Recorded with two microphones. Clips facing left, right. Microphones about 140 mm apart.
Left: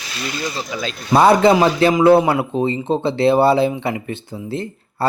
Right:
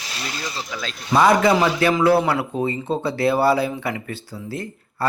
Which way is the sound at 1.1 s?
30° left (ahead or behind).